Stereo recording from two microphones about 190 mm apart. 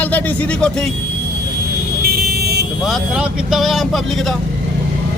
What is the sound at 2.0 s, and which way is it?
Vehicle, 55° right (ahead or behind).